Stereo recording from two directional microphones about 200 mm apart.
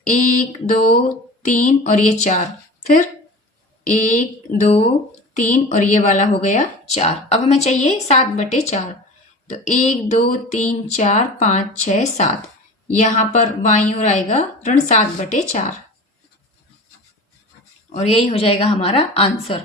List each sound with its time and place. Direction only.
0.1 s speech: 40° left (ahead or behind)
3.8 s speech: 40° left (ahead or behind)
5.3 s speech: 40° left (ahead or behind)
17.9 s speech: 30° left (ahead or behind)